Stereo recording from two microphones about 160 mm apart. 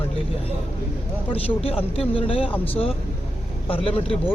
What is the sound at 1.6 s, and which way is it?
Speech, 35° left (ahead or behind).